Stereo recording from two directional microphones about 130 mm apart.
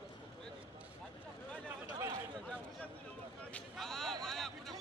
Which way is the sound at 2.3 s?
10° left (ahead or behind).